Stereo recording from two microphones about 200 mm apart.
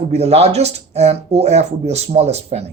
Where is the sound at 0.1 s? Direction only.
30° right (ahead or behind).